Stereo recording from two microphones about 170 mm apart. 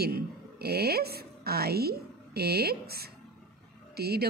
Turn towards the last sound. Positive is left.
turn(degrees=-70)  # may be behind; listen again after turning